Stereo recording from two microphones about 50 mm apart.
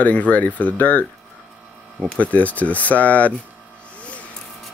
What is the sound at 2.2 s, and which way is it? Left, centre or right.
Speech, left.